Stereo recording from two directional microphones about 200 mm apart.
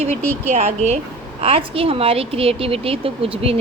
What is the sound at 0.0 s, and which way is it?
A woman's voice, 35° right (ahead or behind).